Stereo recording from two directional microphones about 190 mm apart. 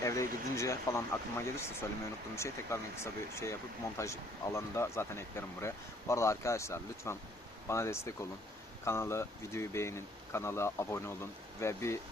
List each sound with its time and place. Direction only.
0.0 s speech: 15° left (ahead or behind)